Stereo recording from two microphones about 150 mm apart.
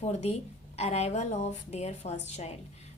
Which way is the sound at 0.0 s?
45° left (ahead or behind).